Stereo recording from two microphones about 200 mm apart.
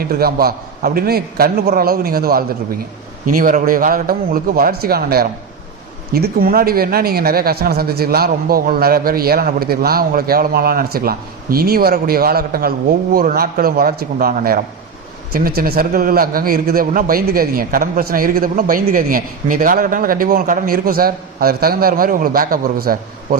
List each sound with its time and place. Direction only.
0.0 s a man's voice: 50° right (ahead or behind)